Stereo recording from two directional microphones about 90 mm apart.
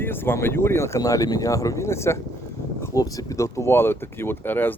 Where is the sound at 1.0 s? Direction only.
40° left (ahead or behind).